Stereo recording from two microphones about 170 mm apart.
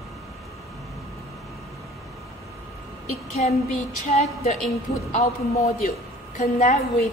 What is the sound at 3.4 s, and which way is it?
Speech, 40° left (ahead or behind).